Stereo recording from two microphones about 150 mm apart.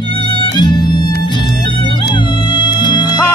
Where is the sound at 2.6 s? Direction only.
30° left (ahead or behind).